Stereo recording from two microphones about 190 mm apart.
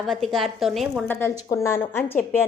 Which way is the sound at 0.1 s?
Centre (ahead or behind).